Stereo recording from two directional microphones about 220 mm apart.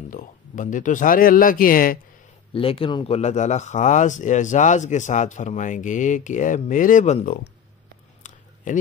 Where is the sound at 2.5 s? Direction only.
25° left (ahead or behind).